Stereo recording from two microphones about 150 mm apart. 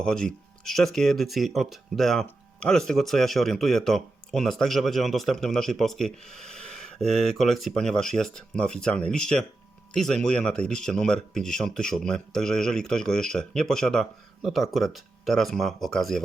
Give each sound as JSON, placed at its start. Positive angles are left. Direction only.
{"t": 0.0, "sound": "speech", "side_deg": 5}